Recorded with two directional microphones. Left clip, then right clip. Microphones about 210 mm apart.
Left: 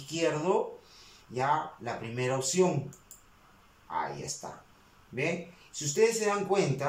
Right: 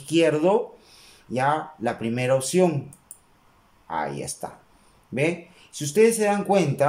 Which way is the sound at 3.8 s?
50° right (ahead or behind).